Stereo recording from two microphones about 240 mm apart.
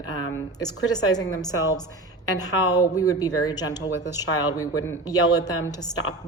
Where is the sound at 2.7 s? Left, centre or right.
Centre.